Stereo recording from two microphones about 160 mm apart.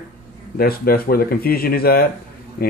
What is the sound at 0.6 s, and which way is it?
Speech, 70° left (ahead or behind).